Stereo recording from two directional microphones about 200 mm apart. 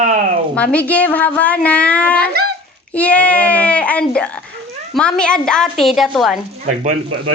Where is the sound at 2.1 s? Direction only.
50° right (ahead or behind).